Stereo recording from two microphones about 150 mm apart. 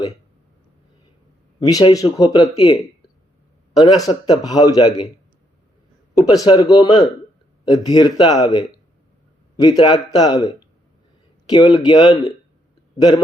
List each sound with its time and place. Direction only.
1.6 s speech: 25° left (ahead or behind)
3.8 s speech: 25° left (ahead or behind)
6.4 s speech: 25° left (ahead or behind)